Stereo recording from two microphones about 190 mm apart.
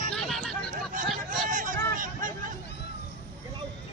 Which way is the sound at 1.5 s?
45° right (ahead or behind).